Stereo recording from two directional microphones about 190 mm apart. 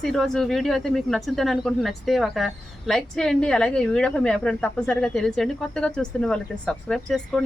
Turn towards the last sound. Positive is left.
turn(degrees=5)  # may be behind; listen again after turning